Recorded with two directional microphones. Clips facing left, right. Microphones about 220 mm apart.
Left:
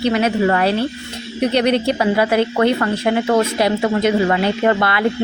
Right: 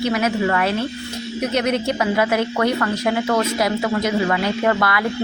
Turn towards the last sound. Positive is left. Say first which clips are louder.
# left 3 dB
turn(degrees=25)  # may be behind; listen again after turning